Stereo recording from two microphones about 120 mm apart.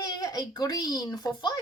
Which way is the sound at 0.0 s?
30° left (ahead or behind).